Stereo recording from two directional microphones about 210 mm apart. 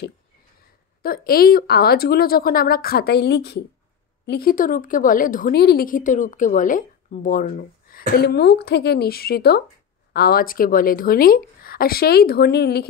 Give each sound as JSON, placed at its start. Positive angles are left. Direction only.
{"t": 1.0, "sound": "a woman's voice", "side_deg": 45}